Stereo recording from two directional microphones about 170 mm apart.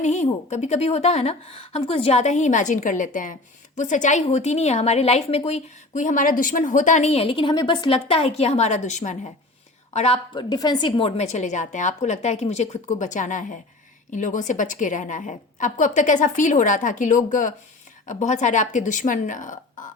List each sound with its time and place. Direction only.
0.0 s a woman's voice: 45° left (ahead or behind)
10.3 s a woman's voice: 25° left (ahead or behind); by 19.8 s 50° left (ahead or behind)